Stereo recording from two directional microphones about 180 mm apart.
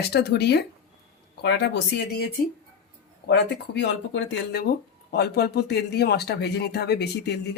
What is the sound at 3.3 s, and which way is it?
Speech, 70° left (ahead or behind).